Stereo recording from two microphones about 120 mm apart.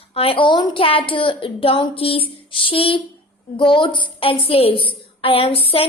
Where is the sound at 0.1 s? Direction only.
50° left (ahead or behind).